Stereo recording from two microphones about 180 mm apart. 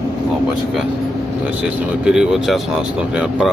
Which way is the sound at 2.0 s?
5° right (ahead or behind).